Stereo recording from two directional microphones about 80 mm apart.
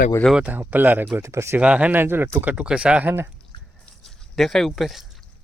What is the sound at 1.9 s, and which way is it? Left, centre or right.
Speech, right.